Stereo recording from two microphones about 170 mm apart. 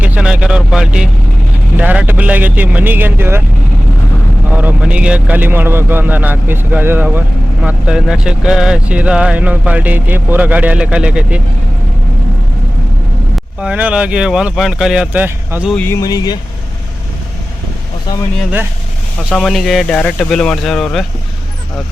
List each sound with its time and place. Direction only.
0.0 s a sound: 5° right (ahead or behind)
1.8 s speech: 10° right (ahead or behind)
4.5 s speech: 10° right (ahead or behind)
13.3 s speech: 5° right (ahead or behind)
15.9 s speech: 20° left (ahead or behind)
19.3 s speech: centre (ahead or behind)